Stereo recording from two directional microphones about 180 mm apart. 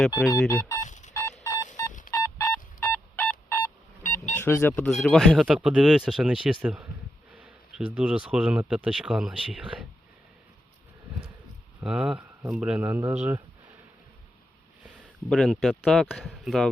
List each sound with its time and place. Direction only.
0.4 s speech: 20° left (ahead or behind)
0.9 s a sound: 40° left (ahead or behind)
1.5 s telephone dialing: 20° left (ahead or behind)
2.0 s a sound: 15° left (ahead or behind)
4.4 s speech: 15° left (ahead or behind)
5.0 s speech: centre (ahead or behind)
11.8 s speech: 5° right (ahead or behind)
14.9 s a sound: centre (ahead or behind)
15.8 s speech: 5° left (ahead or behind)